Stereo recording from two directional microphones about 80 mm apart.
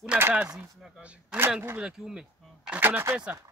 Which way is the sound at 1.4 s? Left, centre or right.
Right.